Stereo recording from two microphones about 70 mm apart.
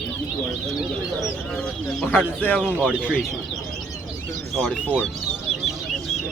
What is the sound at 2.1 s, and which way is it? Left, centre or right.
Speech, left.